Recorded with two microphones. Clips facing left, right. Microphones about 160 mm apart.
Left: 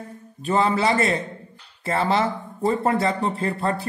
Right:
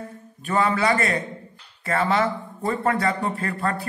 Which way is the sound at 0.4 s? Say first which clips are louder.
Left 1 dB; 30° left (ahead or behind).